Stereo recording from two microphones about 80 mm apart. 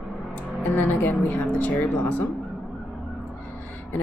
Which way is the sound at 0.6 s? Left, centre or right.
Left.